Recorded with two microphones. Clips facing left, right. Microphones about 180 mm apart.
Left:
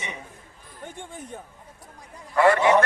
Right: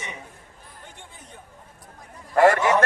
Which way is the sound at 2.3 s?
45° right (ahead or behind).